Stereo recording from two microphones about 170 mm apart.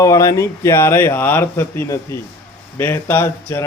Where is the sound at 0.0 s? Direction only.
20° left (ahead or behind).